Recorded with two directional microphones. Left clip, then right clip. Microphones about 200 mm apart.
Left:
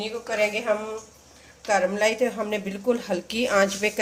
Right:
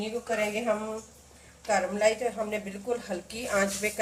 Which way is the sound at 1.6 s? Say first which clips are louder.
Left 3 dB; 55° left (ahead or behind).